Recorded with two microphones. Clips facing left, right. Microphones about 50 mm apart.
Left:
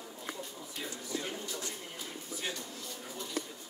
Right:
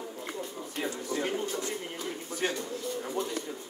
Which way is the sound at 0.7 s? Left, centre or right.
Right.